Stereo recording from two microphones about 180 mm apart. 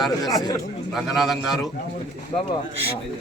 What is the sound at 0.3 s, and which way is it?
Speech, 20° left (ahead or behind).